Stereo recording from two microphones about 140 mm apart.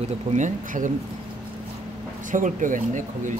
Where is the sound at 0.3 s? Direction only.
60° right (ahead or behind).